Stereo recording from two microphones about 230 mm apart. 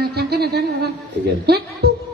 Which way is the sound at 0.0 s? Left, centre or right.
Right.